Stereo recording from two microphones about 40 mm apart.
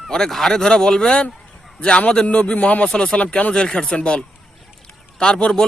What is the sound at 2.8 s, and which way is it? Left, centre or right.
Speech, left.